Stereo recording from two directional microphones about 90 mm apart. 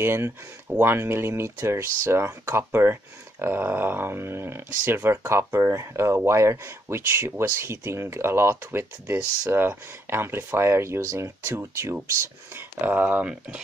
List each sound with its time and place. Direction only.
0.0 s speech: 25° right (ahead or behind)